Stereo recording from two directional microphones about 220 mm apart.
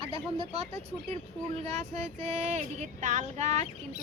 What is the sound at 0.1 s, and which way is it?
Speech, 25° right (ahead or behind).